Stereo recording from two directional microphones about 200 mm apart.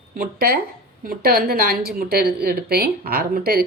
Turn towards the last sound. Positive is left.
turn(degrees=-50)  # may be behind; listen again after turning